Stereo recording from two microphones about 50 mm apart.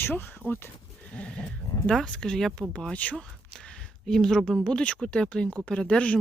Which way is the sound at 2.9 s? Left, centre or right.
Left.